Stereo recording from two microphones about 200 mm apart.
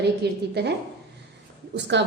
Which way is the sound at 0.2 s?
55° right (ahead or behind).